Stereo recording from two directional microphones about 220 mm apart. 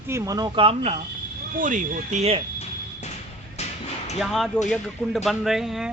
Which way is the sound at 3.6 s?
30° left (ahead or behind).